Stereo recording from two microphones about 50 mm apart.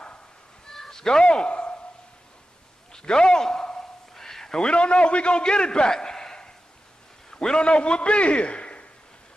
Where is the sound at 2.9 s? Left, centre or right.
Centre.